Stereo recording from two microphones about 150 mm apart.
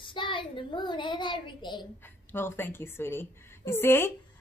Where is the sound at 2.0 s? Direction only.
15° left (ahead or behind).